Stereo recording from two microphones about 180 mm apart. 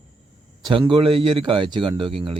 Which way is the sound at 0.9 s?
30° right (ahead or behind).